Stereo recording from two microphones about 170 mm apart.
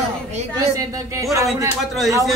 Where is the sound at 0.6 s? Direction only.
20° right (ahead or behind).